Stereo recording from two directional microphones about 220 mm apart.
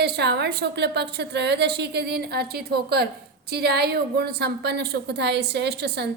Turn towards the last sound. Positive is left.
turn(degrees=-50)  # may be behind; listen again after turning